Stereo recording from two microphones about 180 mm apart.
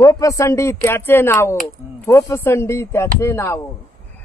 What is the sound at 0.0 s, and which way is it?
Speech, 20° left (ahead or behind).